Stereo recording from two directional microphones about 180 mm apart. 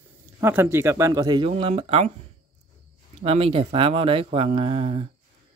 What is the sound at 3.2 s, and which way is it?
Speech, 35° right (ahead or behind).